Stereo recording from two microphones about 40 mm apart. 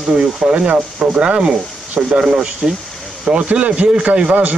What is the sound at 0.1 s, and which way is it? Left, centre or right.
Speech, right.